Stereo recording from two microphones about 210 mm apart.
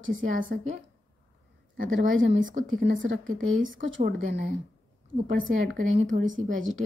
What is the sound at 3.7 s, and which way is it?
Speech, 40° right (ahead or behind).